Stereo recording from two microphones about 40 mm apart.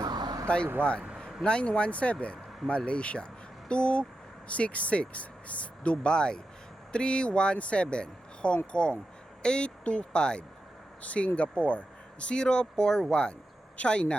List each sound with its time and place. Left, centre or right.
0.4 s speech: left
11.0 s speech: left